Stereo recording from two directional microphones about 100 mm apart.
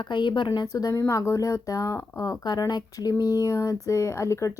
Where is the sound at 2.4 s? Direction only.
45° left (ahead or behind).